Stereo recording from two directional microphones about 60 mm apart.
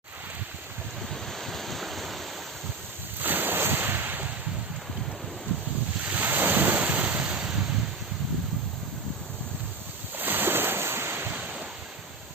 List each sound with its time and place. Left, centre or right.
1.1 s waves: centre
3.2 s ocean: right
6.1 s waves: right; by 7.6 s centre
10.2 s ocean: right